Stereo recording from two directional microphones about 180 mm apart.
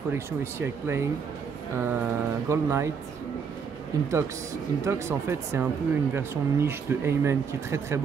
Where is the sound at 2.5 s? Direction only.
15° right (ahead or behind).